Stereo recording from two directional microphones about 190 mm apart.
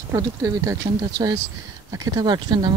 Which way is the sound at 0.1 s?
15° right (ahead or behind).